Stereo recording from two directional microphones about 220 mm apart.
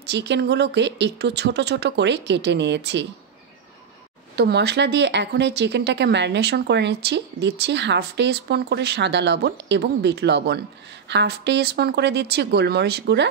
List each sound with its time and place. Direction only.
0.0 s speech: 50° right (ahead or behind)
4.4 s speech: 50° right (ahead or behind)